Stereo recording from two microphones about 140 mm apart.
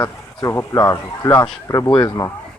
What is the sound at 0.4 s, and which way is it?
Speech, 20° left (ahead or behind).